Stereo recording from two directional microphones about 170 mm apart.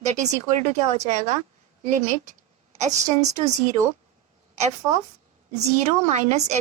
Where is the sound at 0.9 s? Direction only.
45° right (ahead or behind).